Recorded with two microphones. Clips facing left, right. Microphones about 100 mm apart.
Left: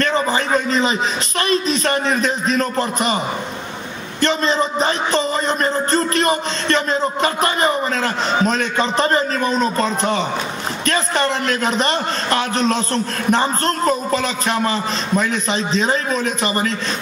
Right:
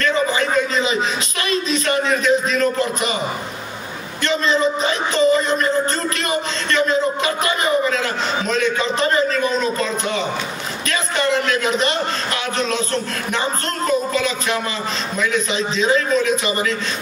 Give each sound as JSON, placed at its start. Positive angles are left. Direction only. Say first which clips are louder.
{"t": 0.0, "sound": "a sound", "louder": "even", "side_deg": 35}
{"t": 1.5, "sound": "a man's voice", "louder": "left 1 dB", "side_deg": 40}
{"t": 4.2, "sound": "a man's voice", "louder": "even", "side_deg": 35}